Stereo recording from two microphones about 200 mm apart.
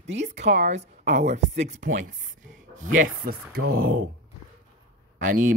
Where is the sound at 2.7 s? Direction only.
40° right (ahead or behind).